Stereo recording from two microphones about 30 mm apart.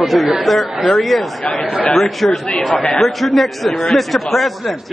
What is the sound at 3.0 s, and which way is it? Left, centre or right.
A man's voice, centre.